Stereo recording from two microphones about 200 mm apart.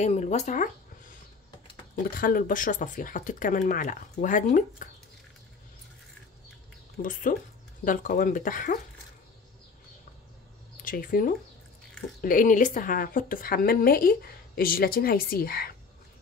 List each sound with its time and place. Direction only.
0.0 s speech: 35° left (ahead or behind)
2.0 s speech: 45° left (ahead or behind)
7.0 s a woman's voice: 40° left (ahead or behind)
10.8 s a woman's voice: 45° left (ahead or behind)